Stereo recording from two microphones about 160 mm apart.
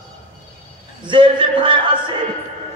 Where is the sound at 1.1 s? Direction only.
30° right (ahead or behind).